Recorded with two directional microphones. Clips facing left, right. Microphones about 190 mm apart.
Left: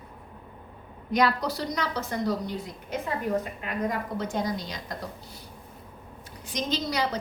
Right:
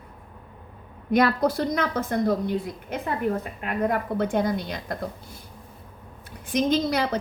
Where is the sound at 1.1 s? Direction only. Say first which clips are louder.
Right 4 dB; 50° right (ahead or behind).